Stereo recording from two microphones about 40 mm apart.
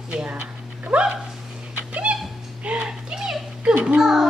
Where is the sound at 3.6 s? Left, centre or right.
Right.